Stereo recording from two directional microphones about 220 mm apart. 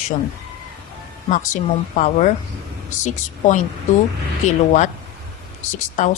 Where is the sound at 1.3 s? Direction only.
35° left (ahead or behind).